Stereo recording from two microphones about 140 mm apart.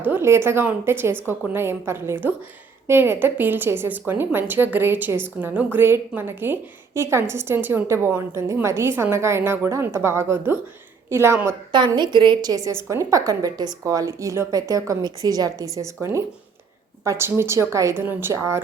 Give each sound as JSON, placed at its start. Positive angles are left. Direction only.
{"t": 0.0, "sound": "a woman's voice", "side_deg": -15}
{"t": 11.9, "sound": "a woman's voice", "side_deg": -35}